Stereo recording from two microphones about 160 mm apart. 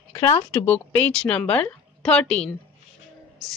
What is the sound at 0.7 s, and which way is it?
A woman's voice, 10° left (ahead or behind).